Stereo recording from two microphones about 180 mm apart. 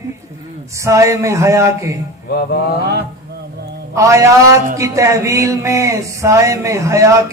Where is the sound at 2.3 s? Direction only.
65° left (ahead or behind).